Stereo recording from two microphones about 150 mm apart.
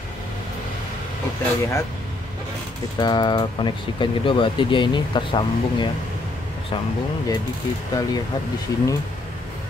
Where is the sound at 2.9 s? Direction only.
30° left (ahead or behind).